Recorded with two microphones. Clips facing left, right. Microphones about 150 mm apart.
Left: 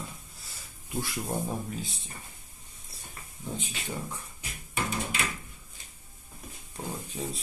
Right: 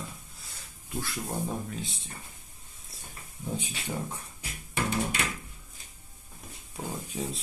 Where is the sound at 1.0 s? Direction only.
15° left (ahead or behind).